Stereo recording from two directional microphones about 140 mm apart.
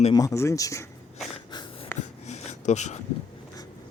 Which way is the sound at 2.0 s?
50° left (ahead or behind).